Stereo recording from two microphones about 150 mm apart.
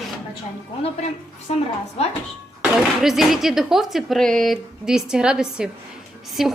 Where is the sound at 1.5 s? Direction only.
45° left (ahead or behind).